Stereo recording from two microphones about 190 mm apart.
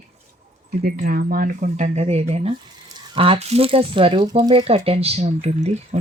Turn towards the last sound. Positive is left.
turn(degrees=-35)  # may be behind; listen again after turning